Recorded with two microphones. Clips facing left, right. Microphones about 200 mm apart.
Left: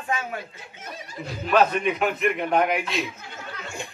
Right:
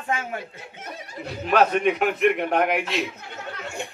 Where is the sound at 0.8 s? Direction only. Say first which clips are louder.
Even; 65° right (ahead or behind).